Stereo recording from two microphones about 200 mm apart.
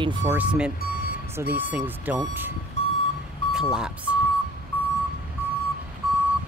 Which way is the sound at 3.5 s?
5° right (ahead or behind).